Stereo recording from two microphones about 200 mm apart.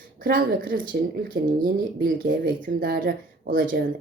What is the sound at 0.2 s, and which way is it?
Speech, 45° right (ahead or behind).